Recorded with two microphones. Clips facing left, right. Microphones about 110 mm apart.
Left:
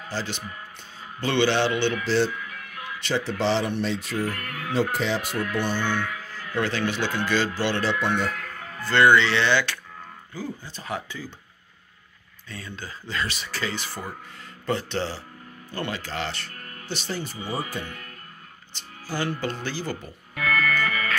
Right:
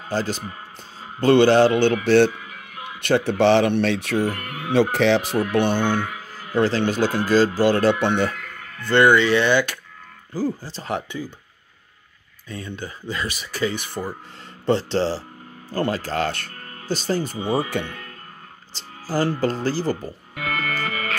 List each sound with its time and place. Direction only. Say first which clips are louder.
0.1 s speech: right 7 dB; 45° right (ahead or behind)
2.0 s speech: right 7 dB; 65° right (ahead or behind)
4.3 s speech: right 4 dB; 20° right (ahead or behind)
4.9 s speech: right 8 dB; 75° right (ahead or behind)
5.5 s speech: right 7 dB; 60° right (ahead or behind)
6.5 s speech: right 6 dB; 35° right (ahead or behind)
8.9 s speech: right 3 dB; 15° right (ahead or behind)
10.3 s speech: right 9 dB; 35° right (ahead or behind)
12.4 s speech: right 5 dB; 20° right (ahead or behind)
14.7 s speech: right 7 dB; 30° right (ahead or behind); by 16.5 s 50° right (ahead or behind)
16.5 s music: right 7 dB; 35° right (ahead or behind)
17.5 s speech: right 8 dB; 70° right (ahead or behind)
18.8 s music: right 7 dB; 35° right (ahead or behind)